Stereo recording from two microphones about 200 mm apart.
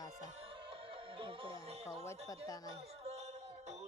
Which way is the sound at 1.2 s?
25° right (ahead or behind).